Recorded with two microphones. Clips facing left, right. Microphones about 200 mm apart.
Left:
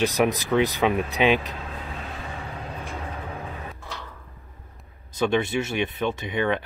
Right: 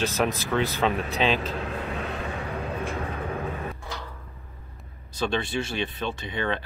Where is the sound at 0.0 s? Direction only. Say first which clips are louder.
Left 4 dB; 15° left (ahead or behind).